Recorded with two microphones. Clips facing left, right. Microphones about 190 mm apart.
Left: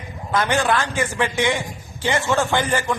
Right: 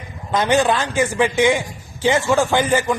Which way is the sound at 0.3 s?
15° right (ahead or behind).